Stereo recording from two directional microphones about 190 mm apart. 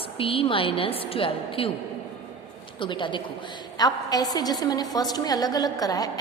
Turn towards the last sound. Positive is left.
turn(degrees=20)  # may be behind; listen again after turning